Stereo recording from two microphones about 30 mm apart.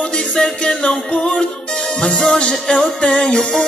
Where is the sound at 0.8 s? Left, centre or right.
Left.